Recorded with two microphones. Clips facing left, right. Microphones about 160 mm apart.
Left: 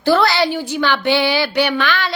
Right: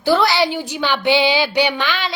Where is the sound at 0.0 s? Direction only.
15° right (ahead or behind).